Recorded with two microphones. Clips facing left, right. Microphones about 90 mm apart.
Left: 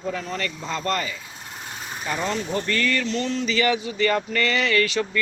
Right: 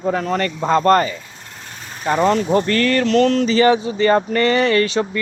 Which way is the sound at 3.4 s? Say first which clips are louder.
Right 8 dB; 35° right (ahead or behind).